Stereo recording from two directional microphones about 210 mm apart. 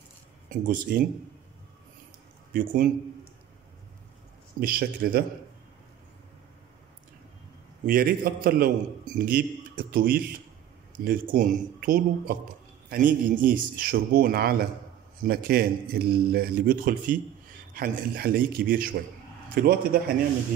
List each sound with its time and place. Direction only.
0.5 s a man's voice: 45° right (ahead or behind)
2.5 s a man's voice: 40° right (ahead or behind)
4.6 s a man's voice: 45° right (ahead or behind)
7.8 s a man's voice: 45° right (ahead or behind)